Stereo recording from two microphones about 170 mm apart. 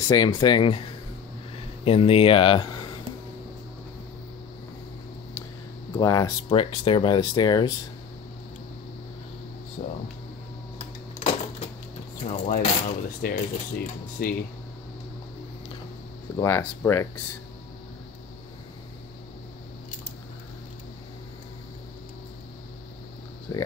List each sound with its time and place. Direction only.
0.0 s speech: 25° left (ahead or behind)
1.9 s speech: 35° left (ahead or behind)
5.9 s speech: 20° left (ahead or behind)
9.8 s speech: 40° left (ahead or behind)
10.8 s cash register: 40° left (ahead or behind)
12.3 s a sound: 45° left (ahead or behind)
14.2 s speech: 60° left (ahead or behind)
16.3 s speech: 15° left (ahead or behind)
23.5 s speech: 20° left (ahead or behind)